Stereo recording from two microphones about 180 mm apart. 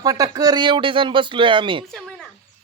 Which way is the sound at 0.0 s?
20° right (ahead or behind).